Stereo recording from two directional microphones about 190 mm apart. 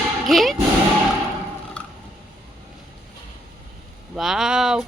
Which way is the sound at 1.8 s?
5° left (ahead or behind).